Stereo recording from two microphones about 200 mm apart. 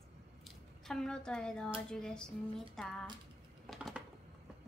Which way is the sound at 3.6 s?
Centre (ahead or behind).